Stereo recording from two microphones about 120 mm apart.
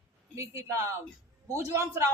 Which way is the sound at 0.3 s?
25° right (ahead or behind).